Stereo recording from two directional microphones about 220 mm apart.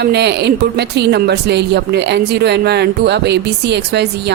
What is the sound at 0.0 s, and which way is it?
Speech, 50° right (ahead or behind).